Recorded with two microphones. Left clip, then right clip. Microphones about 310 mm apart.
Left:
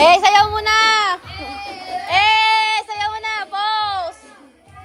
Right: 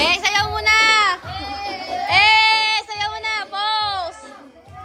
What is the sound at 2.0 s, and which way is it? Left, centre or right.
Child singing, centre.